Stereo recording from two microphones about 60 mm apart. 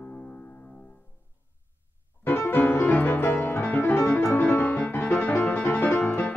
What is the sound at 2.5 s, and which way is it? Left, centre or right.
Music, left.